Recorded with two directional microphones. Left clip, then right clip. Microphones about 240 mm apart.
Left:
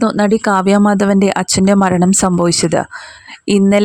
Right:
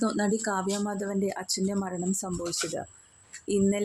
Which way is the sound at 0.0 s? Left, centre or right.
Left.